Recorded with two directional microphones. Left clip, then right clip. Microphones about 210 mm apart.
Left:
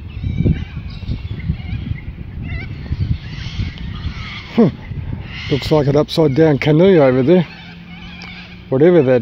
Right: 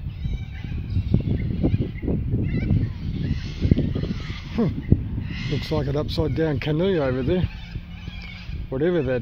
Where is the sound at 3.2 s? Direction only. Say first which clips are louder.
Left 2 dB; 45° right (ahead or behind).